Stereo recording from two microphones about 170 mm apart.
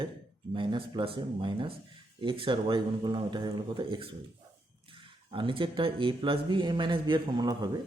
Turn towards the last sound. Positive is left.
turn(degrees=-25)  # may be behind; listen again after turning